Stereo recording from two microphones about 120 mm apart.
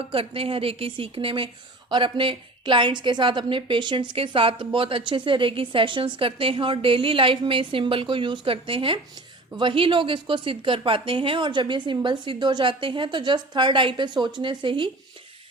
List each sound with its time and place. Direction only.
0.1 s a woman's voice: 50° right (ahead or behind)